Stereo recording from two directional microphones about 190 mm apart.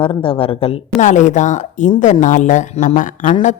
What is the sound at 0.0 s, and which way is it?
Speech, 25° left (ahead or behind).